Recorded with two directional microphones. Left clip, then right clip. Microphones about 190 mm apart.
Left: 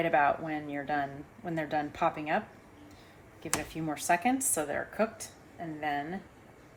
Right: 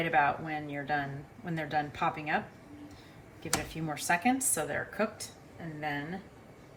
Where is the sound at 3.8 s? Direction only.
45° left (ahead or behind).